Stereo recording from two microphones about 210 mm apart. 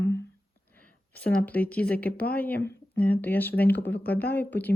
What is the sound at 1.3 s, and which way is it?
Speech, 5° left (ahead or behind).